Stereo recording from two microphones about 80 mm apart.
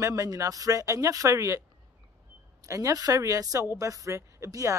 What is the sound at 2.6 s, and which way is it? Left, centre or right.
A woman's voice, right.